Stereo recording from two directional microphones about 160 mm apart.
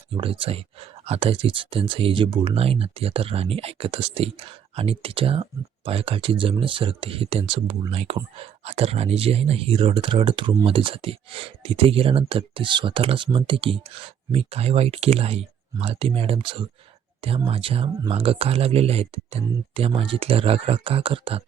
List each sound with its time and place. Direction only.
0.1 s speech: 35° right (ahead or behind)